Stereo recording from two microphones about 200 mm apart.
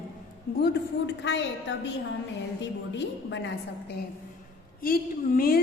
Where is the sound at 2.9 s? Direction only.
60° left (ahead or behind).